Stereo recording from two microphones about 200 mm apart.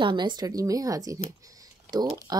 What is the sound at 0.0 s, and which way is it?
A woman's voice, 20° right (ahead or behind).